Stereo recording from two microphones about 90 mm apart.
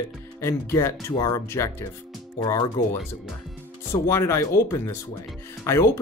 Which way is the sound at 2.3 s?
50° left (ahead or behind).